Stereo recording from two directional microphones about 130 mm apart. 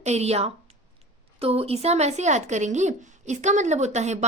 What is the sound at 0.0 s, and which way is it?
Speech, 55° right (ahead or behind).